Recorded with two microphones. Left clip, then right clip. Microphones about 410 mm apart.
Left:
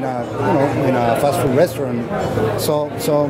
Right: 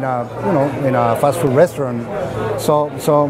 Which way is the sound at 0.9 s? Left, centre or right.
Right.